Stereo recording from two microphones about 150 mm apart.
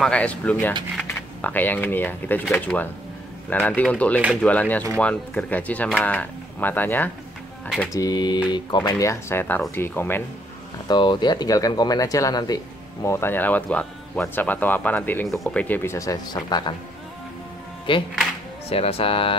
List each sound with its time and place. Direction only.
0.0 s speech: 10° left (ahead or behind)
7.9 s speech: 25° left (ahead or behind)
10.9 s speech: 30° left (ahead or behind)
17.9 s speech: 35° left (ahead or behind)